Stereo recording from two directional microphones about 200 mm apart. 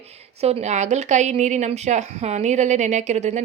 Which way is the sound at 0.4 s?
35° right (ahead or behind).